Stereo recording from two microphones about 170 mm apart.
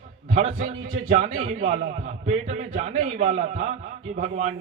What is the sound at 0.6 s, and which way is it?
A man's voice, 50° right (ahead or behind).